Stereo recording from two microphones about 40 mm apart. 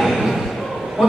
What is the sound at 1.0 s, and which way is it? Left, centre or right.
Speech, centre.